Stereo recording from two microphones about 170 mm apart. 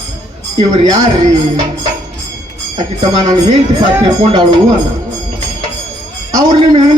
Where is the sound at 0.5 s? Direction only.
25° right (ahead or behind).